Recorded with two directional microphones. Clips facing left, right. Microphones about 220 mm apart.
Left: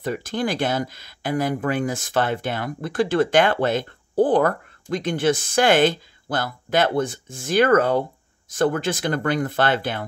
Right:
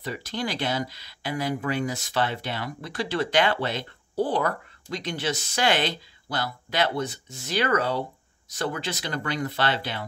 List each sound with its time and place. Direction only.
0.0 s speech: 50° left (ahead or behind)